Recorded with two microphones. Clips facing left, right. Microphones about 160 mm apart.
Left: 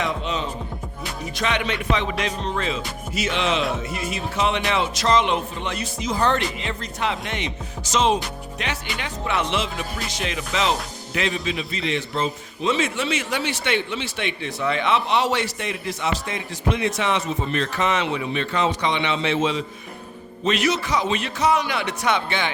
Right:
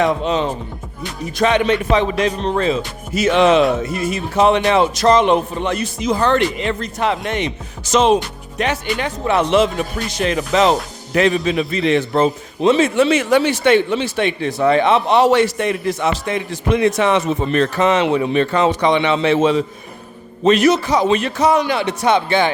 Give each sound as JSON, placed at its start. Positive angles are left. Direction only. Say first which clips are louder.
{"t": 0.0, "sound": "a man's voice", "louder": "right 9 dB", "side_deg": -45}
{"t": 6.6, "sound": "a man's voice", "louder": "right 7 dB", "side_deg": -60}